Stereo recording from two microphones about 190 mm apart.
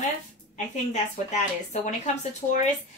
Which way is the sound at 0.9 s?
35° left (ahead or behind).